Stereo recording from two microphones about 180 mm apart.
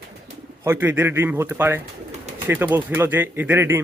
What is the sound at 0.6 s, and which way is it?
Speech, 10° right (ahead or behind).